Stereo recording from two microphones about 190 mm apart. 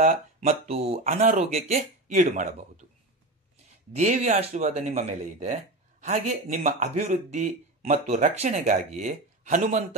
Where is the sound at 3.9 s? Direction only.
40° right (ahead or behind).